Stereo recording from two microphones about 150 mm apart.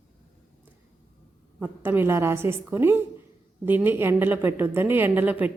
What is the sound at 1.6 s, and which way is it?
Speech, 15° right (ahead or behind).